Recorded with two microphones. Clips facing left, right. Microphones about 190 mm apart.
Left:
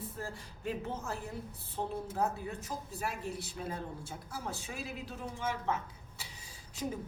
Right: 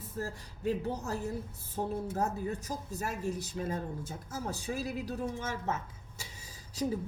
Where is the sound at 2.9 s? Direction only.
45° right (ahead or behind).